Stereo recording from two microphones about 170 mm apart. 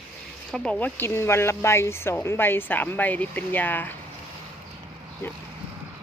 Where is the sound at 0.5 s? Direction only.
5° left (ahead or behind).